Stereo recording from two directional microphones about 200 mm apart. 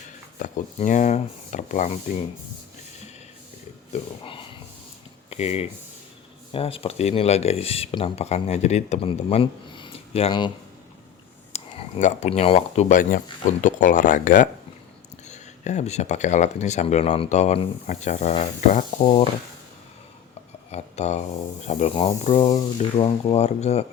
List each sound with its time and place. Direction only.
0.3 s speech: 40° left (ahead or behind)
3.9 s speech: 25° left (ahead or behind)
11.5 s speech: 35° left (ahead or behind)
20.7 s speech: 35° left (ahead or behind)